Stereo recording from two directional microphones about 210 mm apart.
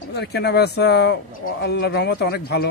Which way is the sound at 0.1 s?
55° left (ahead or behind).